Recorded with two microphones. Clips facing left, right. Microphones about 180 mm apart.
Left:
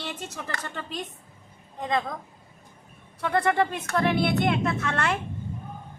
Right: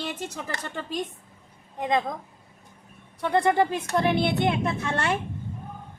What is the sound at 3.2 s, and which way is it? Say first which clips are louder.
Speech: right 2 dB; 25° right (ahead or behind).